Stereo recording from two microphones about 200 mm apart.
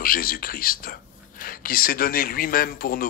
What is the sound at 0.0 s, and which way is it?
Speech, 45° left (ahead or behind).